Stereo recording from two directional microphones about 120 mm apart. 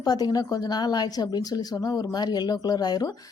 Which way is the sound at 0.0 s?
35° left (ahead or behind).